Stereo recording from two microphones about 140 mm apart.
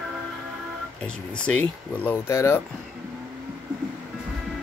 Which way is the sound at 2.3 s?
20° left (ahead or behind).